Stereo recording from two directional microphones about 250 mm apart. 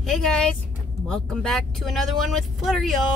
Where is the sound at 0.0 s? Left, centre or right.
Centre.